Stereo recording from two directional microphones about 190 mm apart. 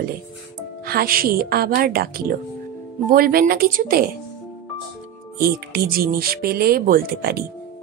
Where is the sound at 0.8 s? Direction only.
50° right (ahead or behind).